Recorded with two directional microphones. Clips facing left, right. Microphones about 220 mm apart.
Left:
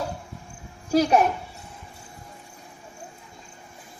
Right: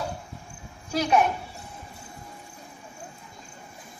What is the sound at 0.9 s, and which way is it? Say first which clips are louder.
Speech: left 4 dB; 40° left (ahead or behind).